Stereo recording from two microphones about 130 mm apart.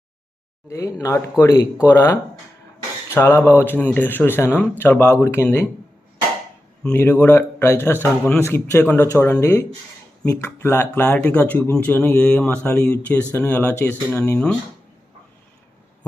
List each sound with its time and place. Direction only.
0.7 s speech: 20° left (ahead or behind)
3.2 s speech: 20° left (ahead or behind)
6.8 s speech: 15° left (ahead or behind)